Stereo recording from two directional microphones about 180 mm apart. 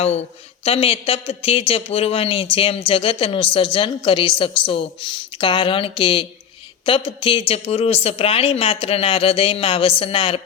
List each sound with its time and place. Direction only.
0.6 s a man's voice: 30° left (ahead or behind)